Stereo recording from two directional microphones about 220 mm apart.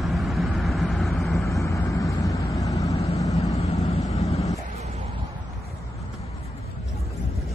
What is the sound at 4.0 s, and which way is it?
Vehicle, 15° left (ahead or behind).